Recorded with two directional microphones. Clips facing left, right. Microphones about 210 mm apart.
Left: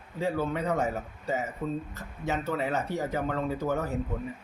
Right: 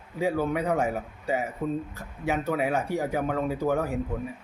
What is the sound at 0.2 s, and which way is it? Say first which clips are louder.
A man's voice: right 3 dB; 10° right (ahead or behind).